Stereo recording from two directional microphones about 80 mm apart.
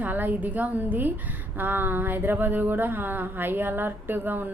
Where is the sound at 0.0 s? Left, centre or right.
Right.